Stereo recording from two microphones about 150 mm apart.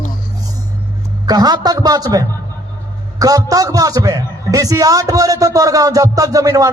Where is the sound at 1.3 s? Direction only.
25° right (ahead or behind).